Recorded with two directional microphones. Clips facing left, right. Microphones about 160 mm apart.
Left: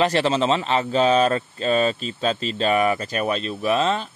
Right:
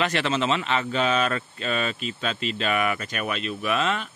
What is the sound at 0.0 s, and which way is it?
Speech, 35° left (ahead or behind).